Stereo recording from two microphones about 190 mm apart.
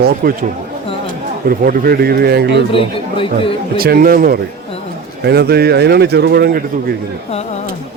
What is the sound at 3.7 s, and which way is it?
Speech, 50° right (ahead or behind).